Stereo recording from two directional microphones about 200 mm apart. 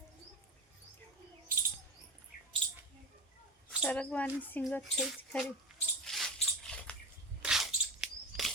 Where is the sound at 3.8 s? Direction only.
5° left (ahead or behind).